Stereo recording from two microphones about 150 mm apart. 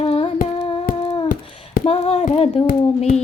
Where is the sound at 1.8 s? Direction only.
40° left (ahead or behind).